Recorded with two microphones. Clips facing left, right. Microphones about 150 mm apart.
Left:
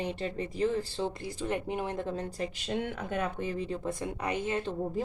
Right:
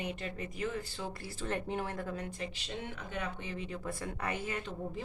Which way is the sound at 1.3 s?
15° left (ahead or behind).